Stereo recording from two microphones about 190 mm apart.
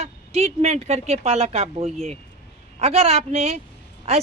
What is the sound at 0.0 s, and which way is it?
Speech, 35° right (ahead or behind).